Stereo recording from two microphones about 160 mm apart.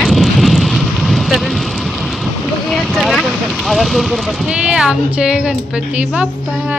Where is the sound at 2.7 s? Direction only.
Centre (ahead or behind).